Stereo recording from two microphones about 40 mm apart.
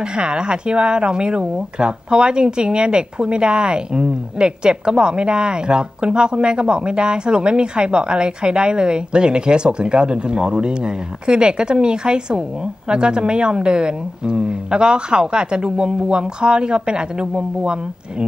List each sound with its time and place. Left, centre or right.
0.1 s speech: right